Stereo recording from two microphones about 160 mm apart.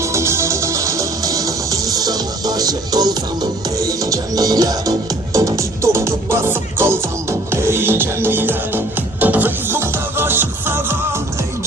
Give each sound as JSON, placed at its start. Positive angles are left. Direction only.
{"t": 0.0, "sound": "music", "side_deg": -15}